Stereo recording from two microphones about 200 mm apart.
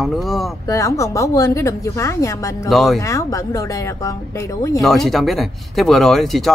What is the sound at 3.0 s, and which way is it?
Speech, 15° left (ahead or behind).